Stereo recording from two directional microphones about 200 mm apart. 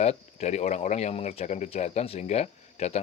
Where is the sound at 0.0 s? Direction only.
35° left (ahead or behind).